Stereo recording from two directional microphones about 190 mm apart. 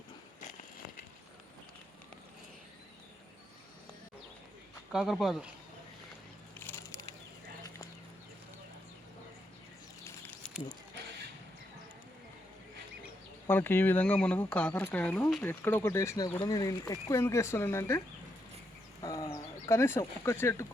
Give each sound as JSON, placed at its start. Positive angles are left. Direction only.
{"t": 4.9, "sound": "speech", "side_deg": 0}
{"t": 6.6, "sound": "a sound", "side_deg": 10}
{"t": 10.0, "sound": "a sound", "side_deg": 15}
{"t": 13.5, "sound": "speech", "side_deg": 10}
{"t": 19.0, "sound": "bird", "side_deg": 15}
{"t": 19.6, "sound": "speech", "side_deg": 15}